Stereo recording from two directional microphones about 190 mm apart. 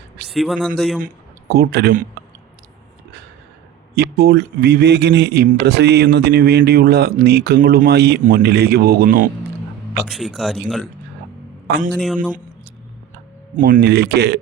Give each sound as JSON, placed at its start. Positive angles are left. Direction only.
{"t": 0.3, "sound": "a man's voice", "side_deg": 0}
{"t": 1.0, "sound": "speech", "side_deg": -55}
{"t": 3.9, "sound": "speech", "side_deg": -55}
{"t": 10.1, "sound": "speech", "side_deg": 0}
{"t": 11.9, "sound": "speech", "side_deg": 5}
{"t": 13.6, "sound": "speech", "side_deg": -45}